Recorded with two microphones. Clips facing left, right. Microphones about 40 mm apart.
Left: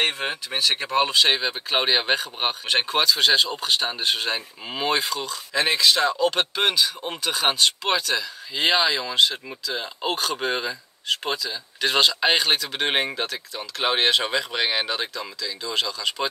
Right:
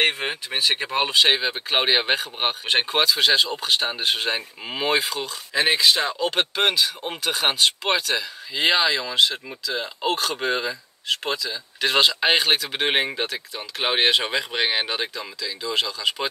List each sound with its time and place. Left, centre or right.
0.0 s speech: right